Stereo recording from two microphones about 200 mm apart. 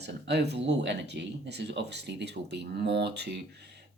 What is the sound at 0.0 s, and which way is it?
Speech, 55° right (ahead or behind).